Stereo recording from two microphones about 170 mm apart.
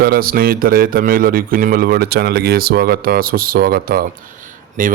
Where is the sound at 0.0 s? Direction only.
60° right (ahead or behind).